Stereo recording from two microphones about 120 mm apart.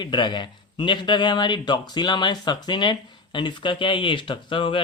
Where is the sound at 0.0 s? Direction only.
40° left (ahead or behind).